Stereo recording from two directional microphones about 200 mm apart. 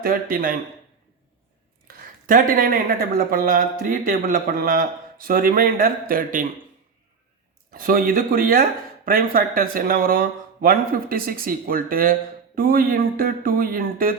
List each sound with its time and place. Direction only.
0.0 s speech: 45° right (ahead or behind)
1.9 s a sound: 50° right (ahead or behind)
2.2 s speech: 45° right (ahead or behind)
7.7 s speech: 45° right (ahead or behind)